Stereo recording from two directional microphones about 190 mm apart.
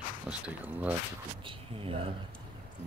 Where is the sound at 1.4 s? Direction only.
25° right (ahead or behind).